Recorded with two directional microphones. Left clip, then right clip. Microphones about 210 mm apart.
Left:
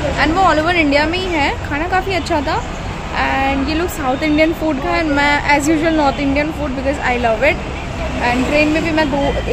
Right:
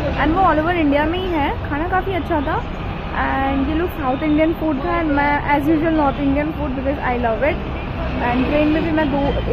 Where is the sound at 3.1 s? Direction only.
15° left (ahead or behind).